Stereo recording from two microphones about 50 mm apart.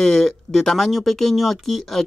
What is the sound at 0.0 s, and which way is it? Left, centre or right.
Speech, centre.